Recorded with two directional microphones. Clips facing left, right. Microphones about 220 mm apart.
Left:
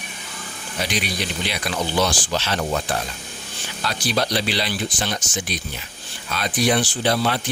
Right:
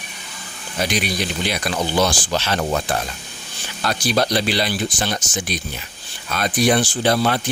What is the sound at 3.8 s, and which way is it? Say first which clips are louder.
Speech: right 3 dB; 45° right (ahead or behind).